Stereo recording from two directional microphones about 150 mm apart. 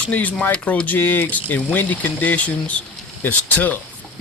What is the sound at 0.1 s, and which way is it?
Speech, 10° left (ahead or behind).